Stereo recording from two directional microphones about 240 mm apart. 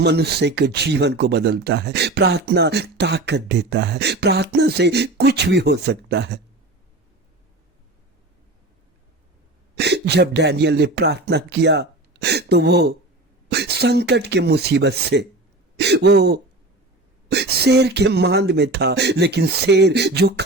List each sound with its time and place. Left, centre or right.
0.0 s speech: right
9.7 s speech: right